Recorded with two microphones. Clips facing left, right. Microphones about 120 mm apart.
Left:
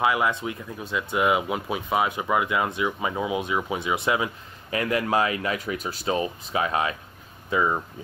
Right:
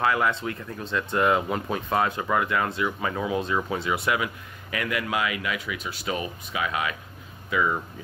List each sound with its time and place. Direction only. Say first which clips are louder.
0.0 s speech: left 1 dB; 15° left (ahead or behind)